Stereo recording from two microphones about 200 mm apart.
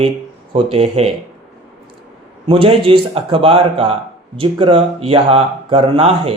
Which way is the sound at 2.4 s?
30° right (ahead or behind).